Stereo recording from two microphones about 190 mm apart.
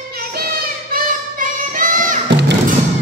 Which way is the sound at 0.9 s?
45° right (ahead or behind).